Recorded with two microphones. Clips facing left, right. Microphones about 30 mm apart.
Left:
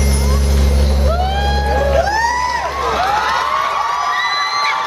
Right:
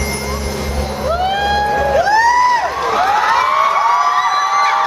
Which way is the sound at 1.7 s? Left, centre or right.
Centre.